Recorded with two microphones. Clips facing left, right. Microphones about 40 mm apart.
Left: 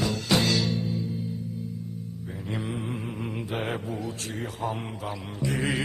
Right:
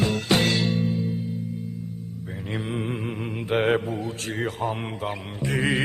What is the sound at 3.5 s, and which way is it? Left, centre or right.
Mantra, right.